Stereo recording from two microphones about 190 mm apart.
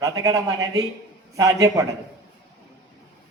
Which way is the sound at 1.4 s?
20° right (ahead or behind).